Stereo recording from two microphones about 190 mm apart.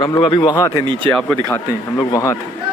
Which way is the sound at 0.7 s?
25° right (ahead or behind).